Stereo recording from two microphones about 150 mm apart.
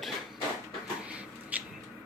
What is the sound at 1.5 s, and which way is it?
Rodents, 10° right (ahead or behind).